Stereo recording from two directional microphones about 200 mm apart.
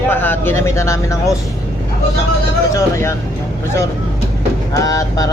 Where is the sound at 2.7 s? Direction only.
15° left (ahead or behind).